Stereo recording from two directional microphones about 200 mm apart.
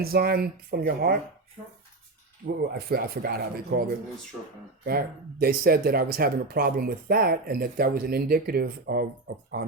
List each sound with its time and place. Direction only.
0.0 s speech: 50° right (ahead or behind)
2.4 s speech: 45° right (ahead or behind)